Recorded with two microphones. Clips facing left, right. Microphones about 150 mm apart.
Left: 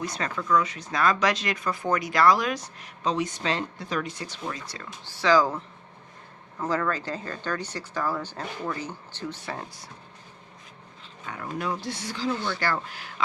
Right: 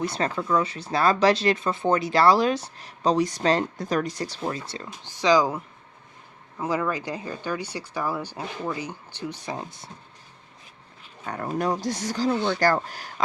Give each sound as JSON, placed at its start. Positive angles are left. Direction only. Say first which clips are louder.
{"t": 0.0, "sound": "speech", "louder": "right 5 dB", "side_deg": -30}
{"t": 11.3, "sound": "speech", "louder": "right 5 dB", "side_deg": -45}